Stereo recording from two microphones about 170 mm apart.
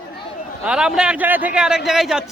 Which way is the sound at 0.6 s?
5° right (ahead or behind).